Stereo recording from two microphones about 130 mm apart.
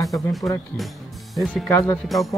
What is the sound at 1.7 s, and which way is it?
Speech, 25° left (ahead or behind).